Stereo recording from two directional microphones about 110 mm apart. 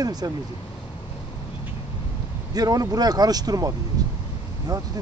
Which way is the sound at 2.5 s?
35° right (ahead or behind).